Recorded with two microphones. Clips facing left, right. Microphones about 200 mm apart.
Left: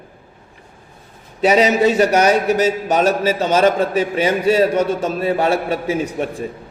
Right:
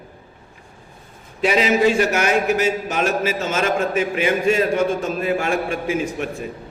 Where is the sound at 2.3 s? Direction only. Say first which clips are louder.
Left 3 dB; 35° left (ahead or behind).